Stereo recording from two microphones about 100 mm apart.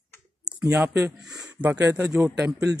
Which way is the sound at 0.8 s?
20° right (ahead or behind).